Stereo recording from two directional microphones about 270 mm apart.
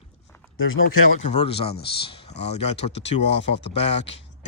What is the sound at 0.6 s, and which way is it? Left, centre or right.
Speech, left.